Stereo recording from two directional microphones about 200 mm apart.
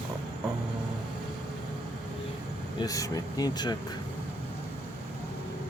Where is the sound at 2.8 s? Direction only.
20° left (ahead or behind).